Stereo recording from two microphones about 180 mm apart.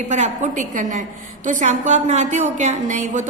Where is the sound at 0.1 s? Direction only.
45° right (ahead or behind).